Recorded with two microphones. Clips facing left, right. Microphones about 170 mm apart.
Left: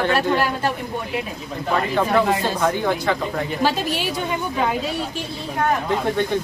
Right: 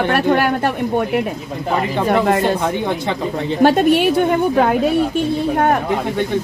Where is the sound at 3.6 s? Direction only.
60° right (ahead or behind).